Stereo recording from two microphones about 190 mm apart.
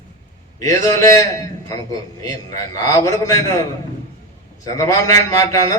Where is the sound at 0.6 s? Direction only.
20° left (ahead or behind).